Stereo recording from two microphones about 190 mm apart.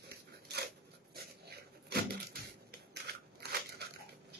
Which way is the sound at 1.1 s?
55° right (ahead or behind).